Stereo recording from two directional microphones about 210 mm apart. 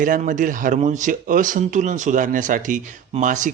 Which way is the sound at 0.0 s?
40° right (ahead or behind).